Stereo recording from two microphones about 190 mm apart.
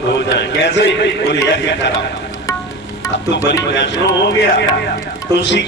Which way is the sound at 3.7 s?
65° left (ahead or behind).